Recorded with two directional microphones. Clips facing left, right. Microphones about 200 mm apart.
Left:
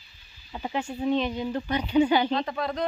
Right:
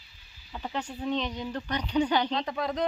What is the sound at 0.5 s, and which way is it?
A woman's voice, 10° left (ahead or behind).